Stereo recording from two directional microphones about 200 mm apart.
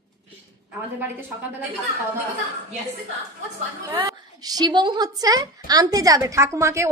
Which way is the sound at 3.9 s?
20° right (ahead or behind).